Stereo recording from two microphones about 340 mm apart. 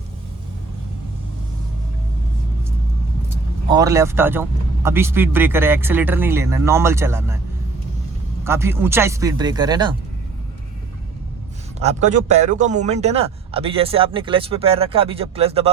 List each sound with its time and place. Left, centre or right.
3.7 s speech: centre
8.4 s speech: centre
11.8 s speech: centre